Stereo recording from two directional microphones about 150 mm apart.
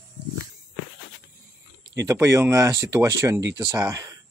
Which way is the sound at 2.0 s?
15° right (ahead or behind).